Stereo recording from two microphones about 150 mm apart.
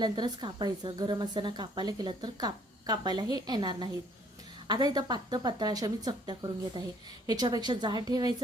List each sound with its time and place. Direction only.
0.0 s a woman's voice: 30° right (ahead or behind)